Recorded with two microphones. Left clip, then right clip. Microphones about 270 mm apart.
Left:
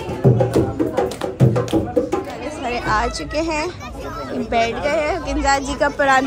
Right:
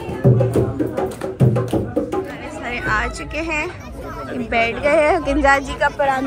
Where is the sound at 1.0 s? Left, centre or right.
Centre.